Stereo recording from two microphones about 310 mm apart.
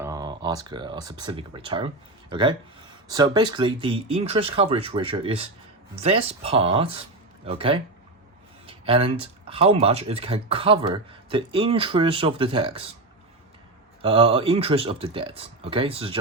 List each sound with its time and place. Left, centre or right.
0.0 s speech: centre
14.0 s speech: centre